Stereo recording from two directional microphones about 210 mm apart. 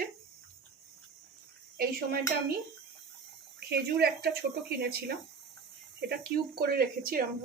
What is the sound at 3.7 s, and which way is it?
Speech, 50° right (ahead or behind).